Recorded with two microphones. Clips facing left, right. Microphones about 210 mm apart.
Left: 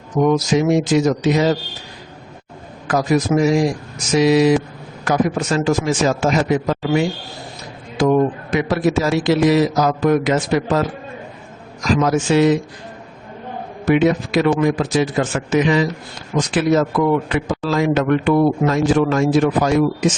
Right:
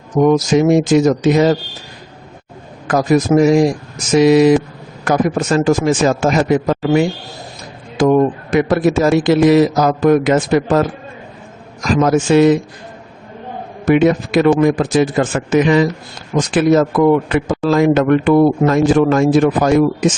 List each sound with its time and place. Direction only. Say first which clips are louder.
0.2 s a man's voice: right 4 dB; 45° right (ahead or behind)
2.8 s a man's voice: right 4 dB; 50° right (ahead or behind)
11.9 s a man's voice: right 5 dB; 50° right (ahead or behind)
13.8 s a man's voice: right 3 dB; 50° right (ahead or behind)